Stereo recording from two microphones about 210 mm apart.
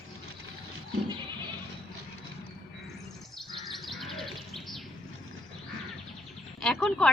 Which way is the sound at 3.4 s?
Centre (ahead or behind).